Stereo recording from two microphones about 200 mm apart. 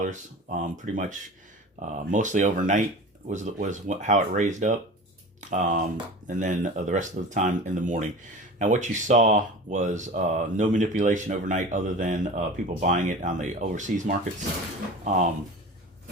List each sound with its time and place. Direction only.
0.0 s speech: 40° right (ahead or behind)